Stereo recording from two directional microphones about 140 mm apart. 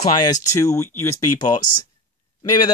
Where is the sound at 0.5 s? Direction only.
20° left (ahead or behind).